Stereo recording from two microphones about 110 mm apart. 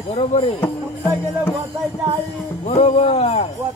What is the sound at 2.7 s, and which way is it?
Speech, 65° left (ahead or behind).